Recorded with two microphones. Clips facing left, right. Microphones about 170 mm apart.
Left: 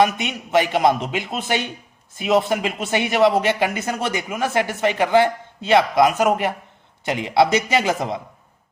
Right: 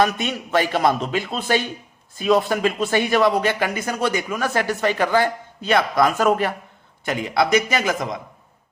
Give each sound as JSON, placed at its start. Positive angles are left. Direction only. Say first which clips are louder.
{"t": 0.0, "sound": "speech", "louder": "left 1 dB", "side_deg": 20}